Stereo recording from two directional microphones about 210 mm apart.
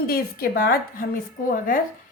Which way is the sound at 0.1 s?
45° left (ahead or behind).